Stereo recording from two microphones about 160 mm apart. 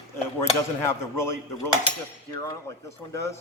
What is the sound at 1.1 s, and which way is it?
Speech, 15° left (ahead or behind).